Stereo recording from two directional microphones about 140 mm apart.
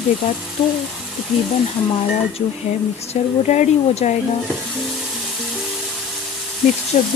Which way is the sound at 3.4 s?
55° left (ahead or behind).